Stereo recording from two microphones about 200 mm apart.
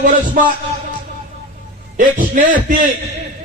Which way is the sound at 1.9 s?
40° right (ahead or behind).